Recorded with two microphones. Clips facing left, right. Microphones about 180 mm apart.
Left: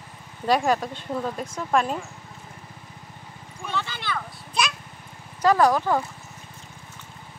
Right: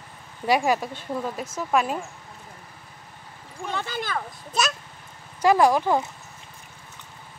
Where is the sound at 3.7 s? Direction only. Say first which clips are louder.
Even; 45° right (ahead or behind).